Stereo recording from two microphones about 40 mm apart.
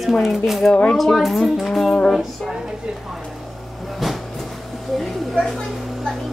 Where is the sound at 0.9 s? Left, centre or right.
Centre.